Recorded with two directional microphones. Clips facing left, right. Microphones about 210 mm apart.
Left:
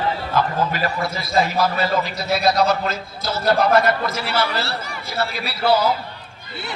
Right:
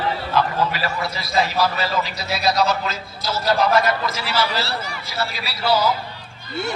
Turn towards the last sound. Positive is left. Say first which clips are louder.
# left 2 dB
turn(degrees=55)  # may be behind; listen again after turning